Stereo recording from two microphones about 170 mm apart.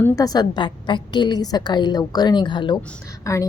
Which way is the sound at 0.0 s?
20° left (ahead or behind).